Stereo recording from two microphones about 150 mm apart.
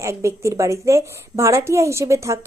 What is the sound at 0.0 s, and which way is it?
A woman's voice, 20° right (ahead or behind).